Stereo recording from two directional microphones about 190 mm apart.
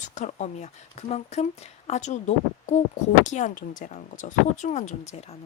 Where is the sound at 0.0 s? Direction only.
40° left (ahead or behind).